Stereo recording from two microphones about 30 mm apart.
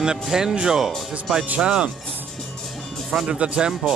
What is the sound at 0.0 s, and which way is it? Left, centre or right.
Speech, right.